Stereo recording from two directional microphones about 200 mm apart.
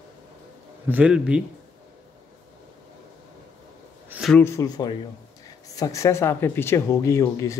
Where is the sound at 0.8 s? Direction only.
5° right (ahead or behind).